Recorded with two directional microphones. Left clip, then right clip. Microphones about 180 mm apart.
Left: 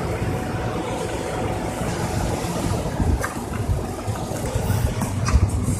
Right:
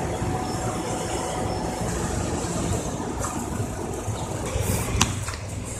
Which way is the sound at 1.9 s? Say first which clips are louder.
Left 3 dB; 30° left (ahead or behind).